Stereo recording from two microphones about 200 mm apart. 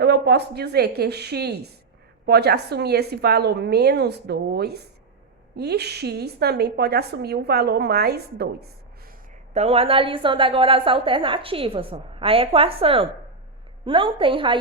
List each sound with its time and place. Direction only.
0.0 s a woman's voice: 55° right (ahead or behind)
9.5 s a woman's voice: 30° right (ahead or behind)